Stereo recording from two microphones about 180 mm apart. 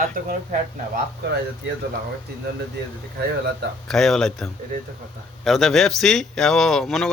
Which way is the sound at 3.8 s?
Centre (ahead or behind).